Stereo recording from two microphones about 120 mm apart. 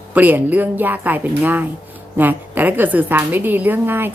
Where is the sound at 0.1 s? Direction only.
15° right (ahead or behind).